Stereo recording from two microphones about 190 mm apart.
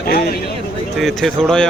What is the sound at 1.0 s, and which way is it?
Speech, centre (ahead or behind).